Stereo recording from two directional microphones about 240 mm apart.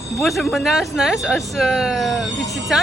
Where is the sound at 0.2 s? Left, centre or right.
Centre.